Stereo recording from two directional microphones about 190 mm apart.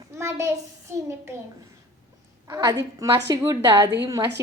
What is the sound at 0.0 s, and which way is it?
A child's voice, 15° right (ahead or behind).